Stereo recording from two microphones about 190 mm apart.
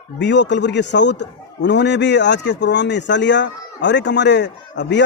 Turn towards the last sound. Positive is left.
turn(degrees=65)  # may be behind; listen again after turning